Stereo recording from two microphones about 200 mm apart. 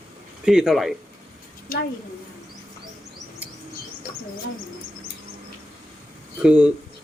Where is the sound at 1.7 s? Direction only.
45° left (ahead or behind).